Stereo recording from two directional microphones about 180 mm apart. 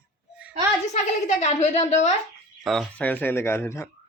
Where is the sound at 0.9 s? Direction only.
40° left (ahead or behind).